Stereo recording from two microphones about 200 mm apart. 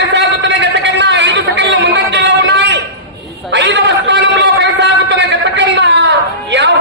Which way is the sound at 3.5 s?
60° right (ahead or behind).